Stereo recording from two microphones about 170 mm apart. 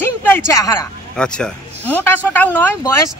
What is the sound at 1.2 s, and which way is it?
A man's voice, 5° left (ahead or behind).